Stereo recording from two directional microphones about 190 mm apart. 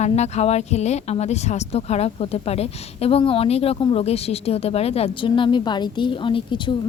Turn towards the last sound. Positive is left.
turn(degrees=25)  # may be behind; listen again after turning